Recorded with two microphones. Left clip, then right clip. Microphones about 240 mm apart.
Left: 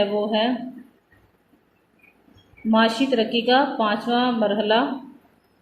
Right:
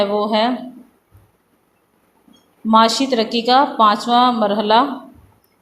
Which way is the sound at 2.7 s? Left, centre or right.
Right.